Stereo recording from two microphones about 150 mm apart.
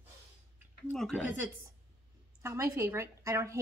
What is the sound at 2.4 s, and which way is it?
A woman's voice, 15° right (ahead or behind).